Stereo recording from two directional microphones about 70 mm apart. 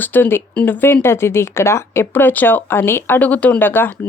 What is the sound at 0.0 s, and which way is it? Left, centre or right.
Speech, left.